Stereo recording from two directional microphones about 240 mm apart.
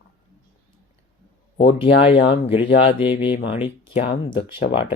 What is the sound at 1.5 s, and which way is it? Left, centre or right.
Speech, left.